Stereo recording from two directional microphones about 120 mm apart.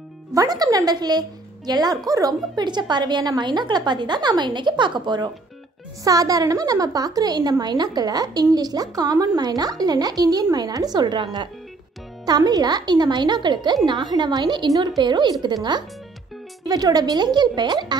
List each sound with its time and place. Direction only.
0.3 s a woman's voice: 30° right (ahead or behind)